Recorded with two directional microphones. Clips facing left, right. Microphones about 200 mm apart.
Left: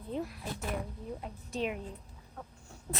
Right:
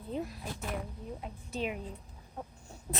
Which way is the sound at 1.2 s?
5° right (ahead or behind).